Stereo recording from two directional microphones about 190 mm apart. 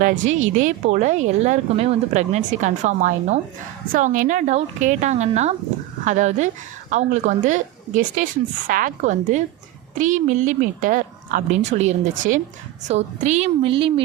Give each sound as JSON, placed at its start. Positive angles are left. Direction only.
{"t": 0.0, "sound": "a woman's voice", "side_deg": -40}